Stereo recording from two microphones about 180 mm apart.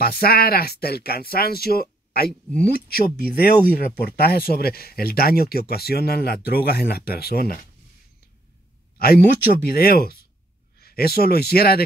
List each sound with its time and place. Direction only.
0.0 s speech: 55° left (ahead or behind)
8.9 s speech: 60° left (ahead or behind)